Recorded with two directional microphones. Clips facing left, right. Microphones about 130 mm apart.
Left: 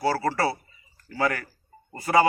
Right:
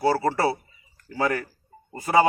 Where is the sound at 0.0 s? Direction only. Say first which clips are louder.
Right 2 dB; 20° right (ahead or behind).